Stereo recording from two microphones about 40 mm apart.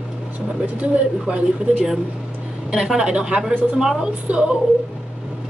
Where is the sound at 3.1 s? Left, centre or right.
Right.